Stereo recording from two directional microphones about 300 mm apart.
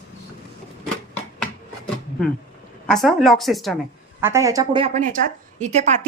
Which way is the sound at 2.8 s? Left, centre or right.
Centre.